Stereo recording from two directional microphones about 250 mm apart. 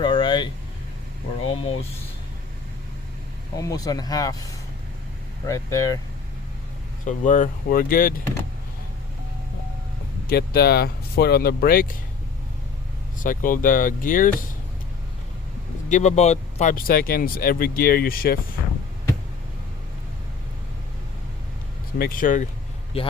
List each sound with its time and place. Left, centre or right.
0.0 s air conditioning: centre
1.5 s speech: left
3.5 s speech: centre
7.0 s speech: left
10.2 s speech: left
13.1 s speech: left
15.9 s speech: left
21.9 s speech: left